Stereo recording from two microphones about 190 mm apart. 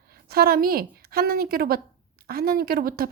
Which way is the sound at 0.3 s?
50° right (ahead or behind).